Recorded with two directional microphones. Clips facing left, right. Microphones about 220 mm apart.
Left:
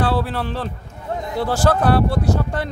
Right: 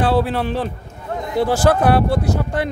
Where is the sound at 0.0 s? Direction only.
20° right (ahead or behind).